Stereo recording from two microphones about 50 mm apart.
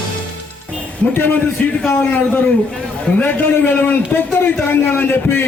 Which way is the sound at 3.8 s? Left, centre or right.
Left.